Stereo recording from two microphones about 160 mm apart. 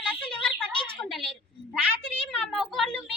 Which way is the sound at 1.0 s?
Centre (ahead or behind).